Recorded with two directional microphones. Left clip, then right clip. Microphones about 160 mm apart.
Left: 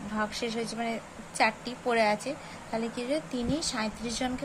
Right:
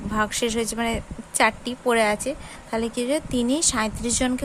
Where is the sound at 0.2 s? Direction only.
50° right (ahead or behind).